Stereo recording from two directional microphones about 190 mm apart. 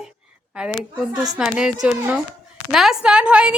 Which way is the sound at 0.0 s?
5° right (ahead or behind).